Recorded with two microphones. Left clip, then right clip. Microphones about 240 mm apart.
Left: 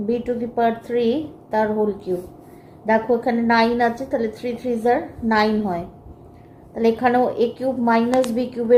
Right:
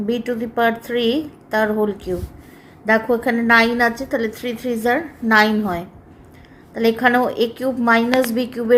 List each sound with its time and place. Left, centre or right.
0.1 s a woman's voice: right